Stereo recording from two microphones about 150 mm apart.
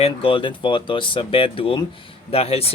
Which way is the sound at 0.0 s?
40° left (ahead or behind).